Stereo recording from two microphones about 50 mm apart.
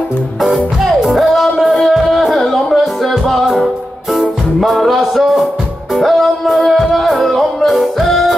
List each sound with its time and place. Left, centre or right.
0.8 s music: centre